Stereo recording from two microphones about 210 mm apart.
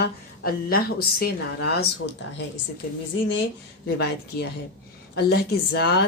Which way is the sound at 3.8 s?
50° left (ahead or behind).